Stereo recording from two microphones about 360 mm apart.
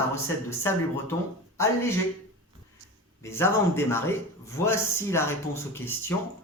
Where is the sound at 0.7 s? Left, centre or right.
Centre.